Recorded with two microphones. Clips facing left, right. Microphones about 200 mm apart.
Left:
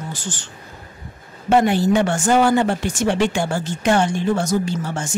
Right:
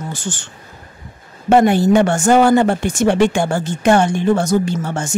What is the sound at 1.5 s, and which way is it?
Speech, 50° right (ahead or behind).